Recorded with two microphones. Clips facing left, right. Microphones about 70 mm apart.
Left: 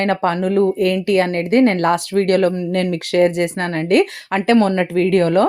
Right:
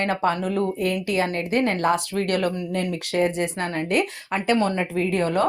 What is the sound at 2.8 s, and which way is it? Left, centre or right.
Speech, left.